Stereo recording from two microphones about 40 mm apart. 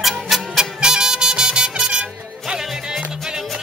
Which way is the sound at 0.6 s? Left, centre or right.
Centre.